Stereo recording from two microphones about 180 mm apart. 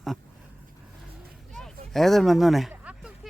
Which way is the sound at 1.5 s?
Centre (ahead or behind).